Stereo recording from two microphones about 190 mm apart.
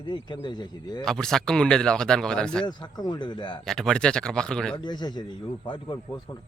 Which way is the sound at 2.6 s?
20° left (ahead or behind).